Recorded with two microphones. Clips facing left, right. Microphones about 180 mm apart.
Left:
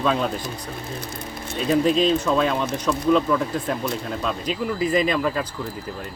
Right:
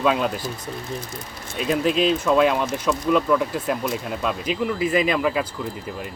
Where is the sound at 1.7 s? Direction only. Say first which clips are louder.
Left 2 dB; 5° right (ahead or behind).